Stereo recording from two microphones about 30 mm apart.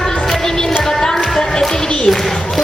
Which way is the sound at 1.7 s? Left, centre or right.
Left.